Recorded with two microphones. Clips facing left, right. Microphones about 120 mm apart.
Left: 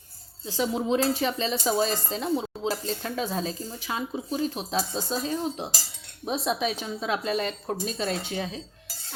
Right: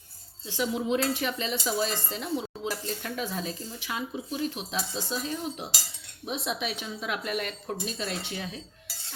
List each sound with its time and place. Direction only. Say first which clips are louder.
0.4 s speech: left 2 dB; 35° left (ahead or behind)